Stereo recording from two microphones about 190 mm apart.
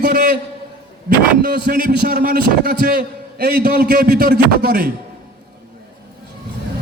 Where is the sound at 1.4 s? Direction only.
55° right (ahead or behind).